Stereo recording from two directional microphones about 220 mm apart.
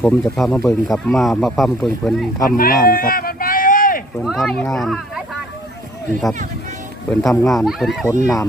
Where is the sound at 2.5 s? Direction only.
40° left (ahead or behind).